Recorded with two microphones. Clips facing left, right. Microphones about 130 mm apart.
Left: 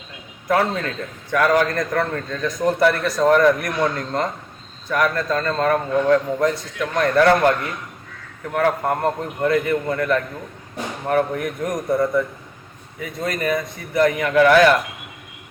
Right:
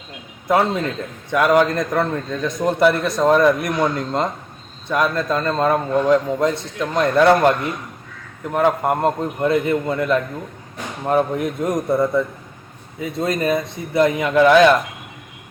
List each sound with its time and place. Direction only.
0.4 s a man's voice: 20° right (ahead or behind)
8.4 s a man's voice: 20° right (ahead or behind)